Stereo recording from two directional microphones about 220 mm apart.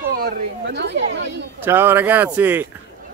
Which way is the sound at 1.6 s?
10° right (ahead or behind).